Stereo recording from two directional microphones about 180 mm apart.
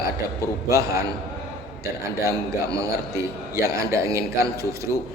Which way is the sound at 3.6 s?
15° right (ahead or behind).